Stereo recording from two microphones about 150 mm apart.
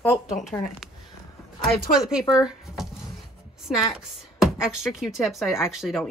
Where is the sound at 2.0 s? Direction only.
5° right (ahead or behind).